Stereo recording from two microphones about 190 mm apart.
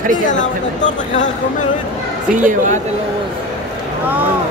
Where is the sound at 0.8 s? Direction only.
40° left (ahead or behind).